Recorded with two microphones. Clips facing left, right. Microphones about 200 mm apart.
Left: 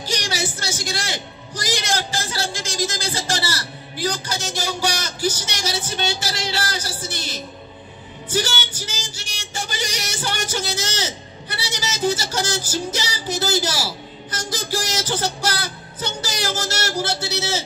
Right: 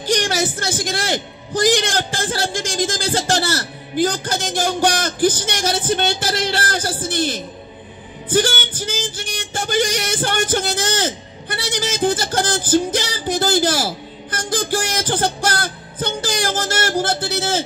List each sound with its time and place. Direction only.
0.0 s music: 55° right (ahead or behind)